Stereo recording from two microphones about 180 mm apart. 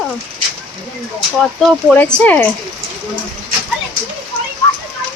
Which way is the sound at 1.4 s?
5° left (ahead or behind).